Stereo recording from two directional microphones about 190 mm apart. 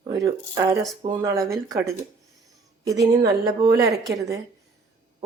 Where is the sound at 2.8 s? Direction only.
20° right (ahead or behind).